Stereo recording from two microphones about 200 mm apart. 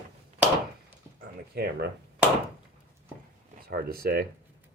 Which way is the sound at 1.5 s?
50° right (ahead or behind).